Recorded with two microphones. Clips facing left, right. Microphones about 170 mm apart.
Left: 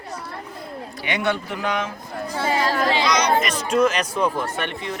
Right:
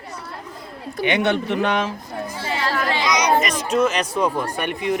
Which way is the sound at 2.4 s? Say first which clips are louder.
Left 4 dB; 45° left (ahead or behind).